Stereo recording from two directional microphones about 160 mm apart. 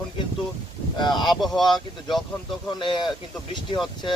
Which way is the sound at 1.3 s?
Centre (ahead or behind).